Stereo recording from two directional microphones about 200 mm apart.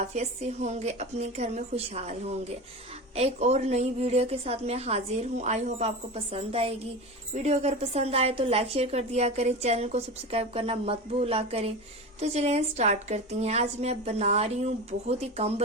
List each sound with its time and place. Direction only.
0.0 s a woman's voice: 35° right (ahead or behind)